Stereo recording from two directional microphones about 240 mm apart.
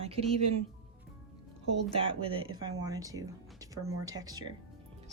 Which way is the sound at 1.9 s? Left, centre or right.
Right.